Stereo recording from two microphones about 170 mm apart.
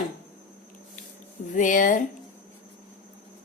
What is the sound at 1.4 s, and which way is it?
Speech, 50° left (ahead or behind).